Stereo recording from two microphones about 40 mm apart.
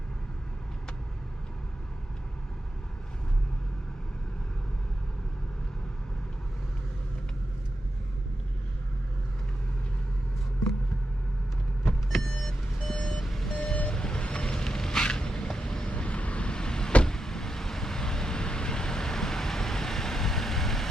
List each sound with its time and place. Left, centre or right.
12.3 s vehicle: centre
13.7 s vehicle: left
15.9 s vehicle: left; by 20.8 s centre